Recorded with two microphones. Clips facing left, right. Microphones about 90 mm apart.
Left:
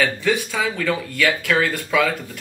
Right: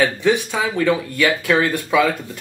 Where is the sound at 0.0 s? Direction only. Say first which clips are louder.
Right 3 dB; 20° right (ahead or behind).